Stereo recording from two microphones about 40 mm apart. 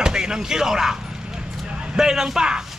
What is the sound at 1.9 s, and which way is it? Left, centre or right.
Speech, centre.